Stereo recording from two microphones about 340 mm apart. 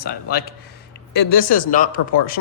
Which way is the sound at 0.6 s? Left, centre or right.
Left.